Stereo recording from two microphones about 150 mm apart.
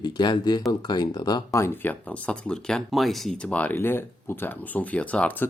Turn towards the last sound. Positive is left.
turn(degrees=10)  # may be behind; listen again after turning